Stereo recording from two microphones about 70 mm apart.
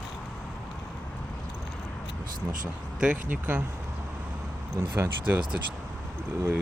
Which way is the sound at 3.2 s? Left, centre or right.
Right.